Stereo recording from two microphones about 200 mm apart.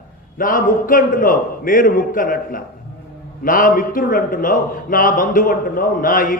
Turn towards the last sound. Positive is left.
turn(degrees=45)  # may be behind; listen again after turning